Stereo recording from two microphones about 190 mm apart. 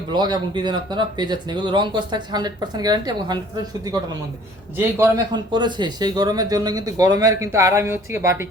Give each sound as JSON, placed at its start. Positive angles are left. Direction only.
{"t": 0.1, "sound": "a man's voice", "side_deg": -25}
{"t": 4.8, "sound": "a man's voice", "side_deg": -15}